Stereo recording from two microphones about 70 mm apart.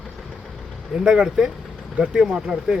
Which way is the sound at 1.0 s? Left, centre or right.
Centre.